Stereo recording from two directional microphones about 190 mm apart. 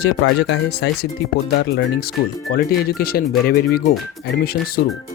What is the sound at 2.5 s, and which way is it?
Speech, 50° left (ahead or behind).